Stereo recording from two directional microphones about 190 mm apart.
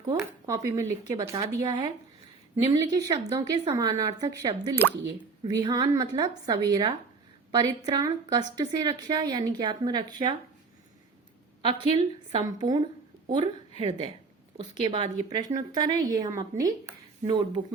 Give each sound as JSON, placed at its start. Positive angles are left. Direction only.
{"t": 0.1, "sound": "speech", "side_deg": -15}
{"t": 2.6, "sound": "a woman's voice", "side_deg": -20}
{"t": 4.7, "sound": "speech", "side_deg": 10}
{"t": 5.5, "sound": "a woman's voice", "side_deg": -20}
{"t": 11.6, "sound": "a woman's voice", "side_deg": -25}